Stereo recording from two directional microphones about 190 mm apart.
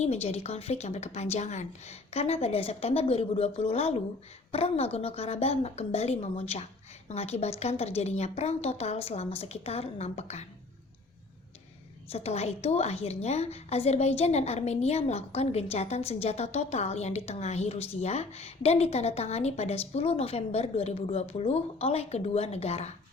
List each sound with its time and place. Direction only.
0.0 s a woman's voice: 35° left (ahead or behind)
12.1 s a woman's voice: 35° left (ahead or behind)